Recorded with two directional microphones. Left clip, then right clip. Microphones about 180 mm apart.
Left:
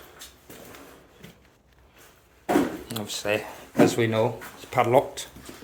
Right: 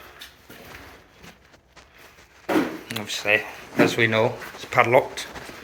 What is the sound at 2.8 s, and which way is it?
Speech, 15° left (ahead or behind).